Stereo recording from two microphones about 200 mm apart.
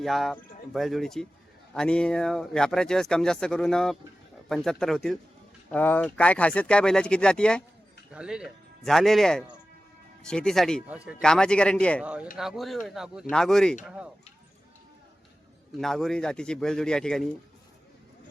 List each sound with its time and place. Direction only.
0.0 s speech: centre (ahead or behind)
12.0 s speech: 5° right (ahead or behind)
15.8 s speech: centre (ahead or behind)